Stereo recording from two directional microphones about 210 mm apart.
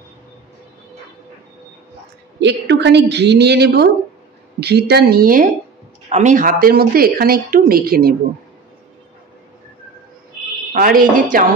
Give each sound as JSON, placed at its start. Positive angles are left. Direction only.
{"t": 2.4, "sound": "speech", "side_deg": -55}
{"t": 10.7, "sound": "speech", "side_deg": -40}